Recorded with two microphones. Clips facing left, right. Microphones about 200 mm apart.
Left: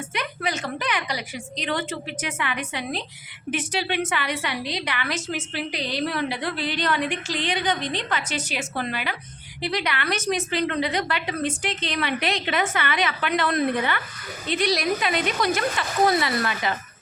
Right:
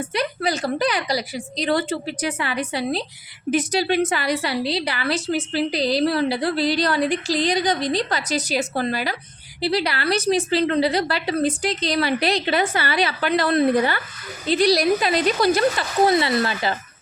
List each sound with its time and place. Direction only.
0.0 s a woman's voice: 35° right (ahead or behind)